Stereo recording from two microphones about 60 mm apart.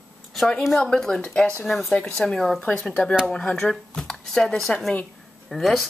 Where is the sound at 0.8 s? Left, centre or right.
Centre.